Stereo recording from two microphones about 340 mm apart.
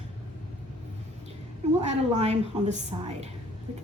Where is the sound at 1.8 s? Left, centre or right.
Centre.